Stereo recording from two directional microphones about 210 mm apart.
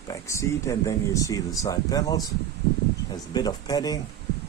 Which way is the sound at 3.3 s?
20° left (ahead or behind).